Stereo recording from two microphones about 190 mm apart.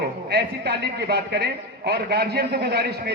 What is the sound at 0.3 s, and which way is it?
A man's voice, 60° right (ahead or behind).